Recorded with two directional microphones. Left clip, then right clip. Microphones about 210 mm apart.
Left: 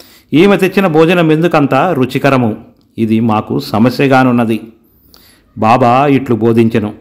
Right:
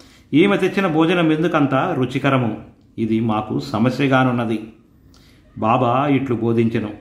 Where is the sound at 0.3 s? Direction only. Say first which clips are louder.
Left 7 dB; 35° left (ahead or behind).